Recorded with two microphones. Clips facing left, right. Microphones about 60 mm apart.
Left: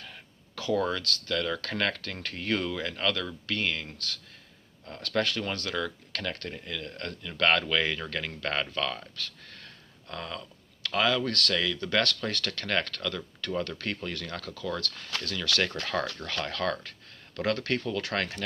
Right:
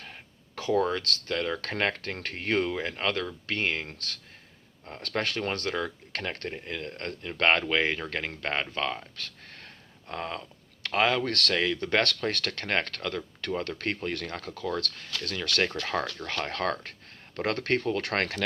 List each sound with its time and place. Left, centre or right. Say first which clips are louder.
0.0 s speech: right 1 dB; right